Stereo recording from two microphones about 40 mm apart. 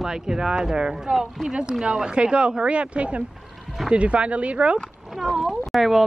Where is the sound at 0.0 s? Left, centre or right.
Centre.